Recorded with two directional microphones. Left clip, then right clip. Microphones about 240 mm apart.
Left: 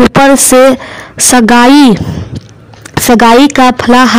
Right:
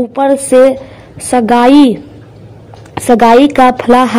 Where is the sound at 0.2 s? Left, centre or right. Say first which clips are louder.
Left 1 dB; left.